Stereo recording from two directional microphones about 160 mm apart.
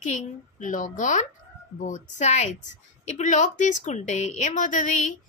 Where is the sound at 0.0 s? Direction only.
50° left (ahead or behind).